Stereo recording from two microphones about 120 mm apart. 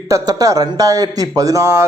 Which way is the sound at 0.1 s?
30° right (ahead or behind).